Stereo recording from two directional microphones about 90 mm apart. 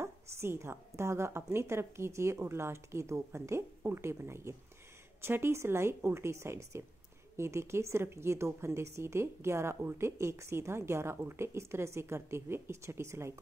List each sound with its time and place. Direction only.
0.0 s a woman's voice: 30° right (ahead or behind)